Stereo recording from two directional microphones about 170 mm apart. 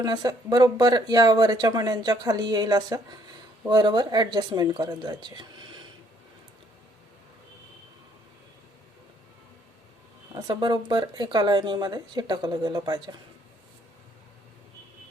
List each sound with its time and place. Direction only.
0.0 s speech: 25° right (ahead or behind)
10.3 s speech: 25° right (ahead or behind)